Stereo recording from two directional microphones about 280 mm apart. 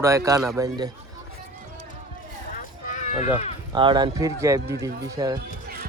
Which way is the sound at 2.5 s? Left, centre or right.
Left.